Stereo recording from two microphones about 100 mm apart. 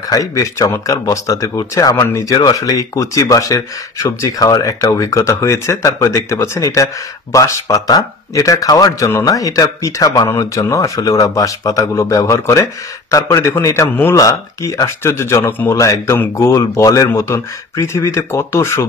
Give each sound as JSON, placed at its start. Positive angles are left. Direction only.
{"t": 0.1, "sound": "speech", "side_deg": 35}
{"t": 2.0, "sound": "speech", "side_deg": 25}